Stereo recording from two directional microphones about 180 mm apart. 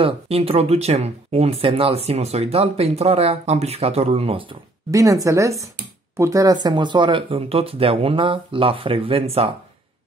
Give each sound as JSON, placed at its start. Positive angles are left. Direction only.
{"t": 0.0, "sound": "speech", "side_deg": -35}
{"t": 4.9, "sound": "a woman's voice", "side_deg": -20}